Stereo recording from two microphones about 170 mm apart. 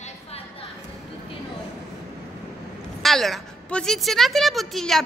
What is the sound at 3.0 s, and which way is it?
A woman's voice, centre (ahead or behind).